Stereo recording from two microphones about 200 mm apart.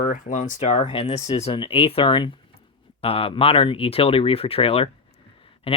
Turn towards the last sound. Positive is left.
turn(degrees=30)  # may be behind; listen again after turning